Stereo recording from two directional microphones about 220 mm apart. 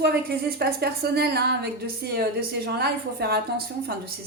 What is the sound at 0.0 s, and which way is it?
Speech, 45° right (ahead or behind).